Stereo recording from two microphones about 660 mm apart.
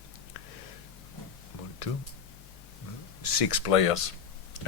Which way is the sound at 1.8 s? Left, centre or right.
Left.